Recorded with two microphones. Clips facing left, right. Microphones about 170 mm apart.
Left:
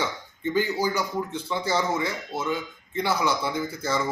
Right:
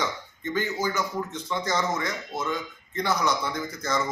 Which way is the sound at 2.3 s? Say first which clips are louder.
Left 1 dB; 30° left (ahead or behind).